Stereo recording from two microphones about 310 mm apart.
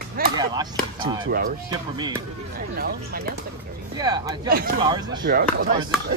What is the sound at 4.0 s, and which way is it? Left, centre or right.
Speech, centre.